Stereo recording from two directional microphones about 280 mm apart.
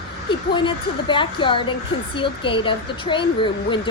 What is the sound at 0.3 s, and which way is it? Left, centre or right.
Speech, centre.